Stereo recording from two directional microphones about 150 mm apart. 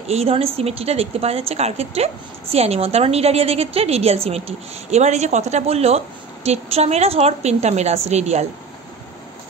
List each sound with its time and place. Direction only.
0.1 s a woman's voice: 40° right (ahead or behind)